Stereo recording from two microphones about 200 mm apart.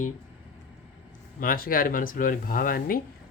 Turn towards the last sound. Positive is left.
turn(degrees=45)  # may be behind; listen again after turning